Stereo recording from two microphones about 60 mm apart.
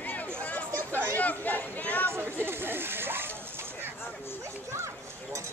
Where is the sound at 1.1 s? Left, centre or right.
Left.